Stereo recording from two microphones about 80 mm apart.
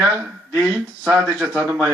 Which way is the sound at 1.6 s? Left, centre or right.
Right.